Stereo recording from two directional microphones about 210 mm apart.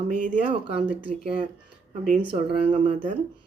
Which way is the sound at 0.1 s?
35° right (ahead or behind).